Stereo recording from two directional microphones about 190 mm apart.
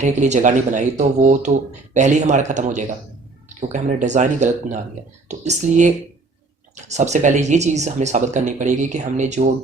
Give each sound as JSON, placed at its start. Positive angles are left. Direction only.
{"t": 0.0, "sound": "speech", "side_deg": -40}